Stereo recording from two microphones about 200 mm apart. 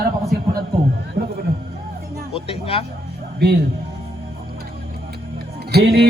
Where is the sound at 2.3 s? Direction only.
30° left (ahead or behind).